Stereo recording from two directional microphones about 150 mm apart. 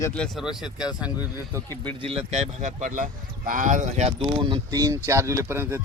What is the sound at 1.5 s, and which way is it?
Speech, 20° right (ahead or behind).